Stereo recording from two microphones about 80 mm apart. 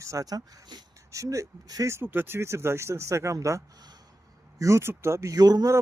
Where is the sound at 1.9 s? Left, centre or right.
Right.